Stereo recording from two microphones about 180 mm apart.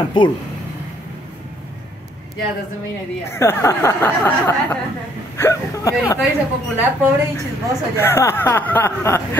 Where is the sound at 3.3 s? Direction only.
15° left (ahead or behind).